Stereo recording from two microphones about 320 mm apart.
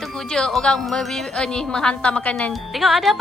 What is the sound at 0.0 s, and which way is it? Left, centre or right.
Speech, centre.